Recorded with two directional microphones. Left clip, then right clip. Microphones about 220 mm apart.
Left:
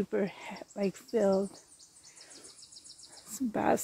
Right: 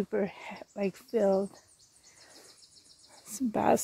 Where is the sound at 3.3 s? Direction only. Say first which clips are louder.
Right 3 dB; 35° right (ahead or behind).